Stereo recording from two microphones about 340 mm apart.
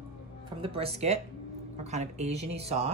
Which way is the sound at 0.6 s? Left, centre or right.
Centre.